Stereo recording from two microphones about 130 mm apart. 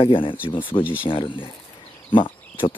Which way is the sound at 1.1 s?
40° left (ahead or behind).